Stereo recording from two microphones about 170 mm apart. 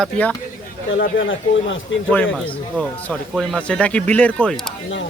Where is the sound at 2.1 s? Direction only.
10° left (ahead or behind).